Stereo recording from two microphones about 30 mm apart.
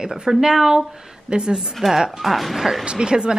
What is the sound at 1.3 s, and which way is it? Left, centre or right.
Speech, right.